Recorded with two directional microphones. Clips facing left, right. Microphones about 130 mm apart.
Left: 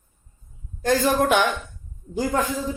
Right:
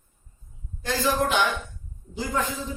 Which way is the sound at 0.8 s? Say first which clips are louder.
Left 5 dB; 45° left (ahead or behind).